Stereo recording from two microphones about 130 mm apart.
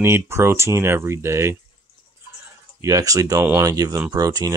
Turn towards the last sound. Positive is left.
turn(degrees=-30)  # may be behind; listen again after turning